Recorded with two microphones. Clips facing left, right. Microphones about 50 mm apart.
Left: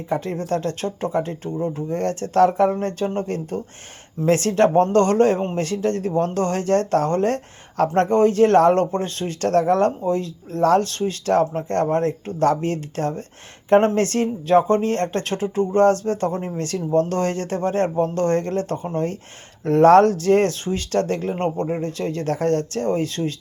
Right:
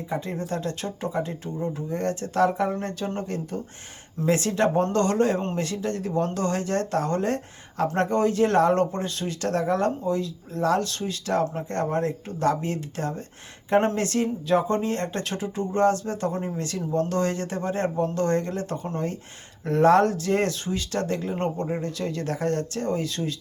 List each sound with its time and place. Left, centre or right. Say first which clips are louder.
0.1 s speech: left 7 dB; left